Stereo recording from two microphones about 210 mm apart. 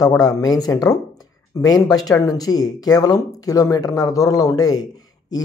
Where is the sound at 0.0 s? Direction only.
15° left (ahead or behind).